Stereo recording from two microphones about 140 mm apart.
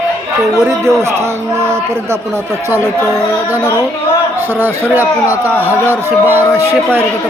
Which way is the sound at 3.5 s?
15° right (ahead or behind).